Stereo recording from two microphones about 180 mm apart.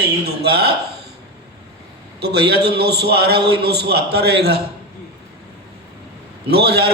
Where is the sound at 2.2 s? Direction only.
65° right (ahead or behind).